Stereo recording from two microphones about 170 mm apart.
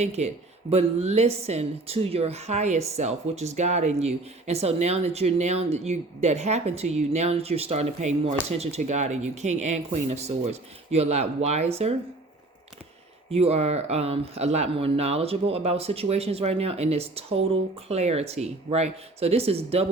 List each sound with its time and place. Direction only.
0.2 s a woman's voice: 40° right (ahead or behind)
13.3 s a woman's voice: 35° right (ahead or behind)